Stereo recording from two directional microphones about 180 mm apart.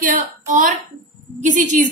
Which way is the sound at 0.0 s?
45° right (ahead or behind).